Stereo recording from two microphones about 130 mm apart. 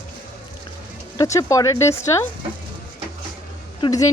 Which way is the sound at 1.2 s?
25° left (ahead or behind).